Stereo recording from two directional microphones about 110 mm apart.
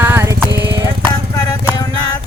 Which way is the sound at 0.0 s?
20° right (ahead or behind).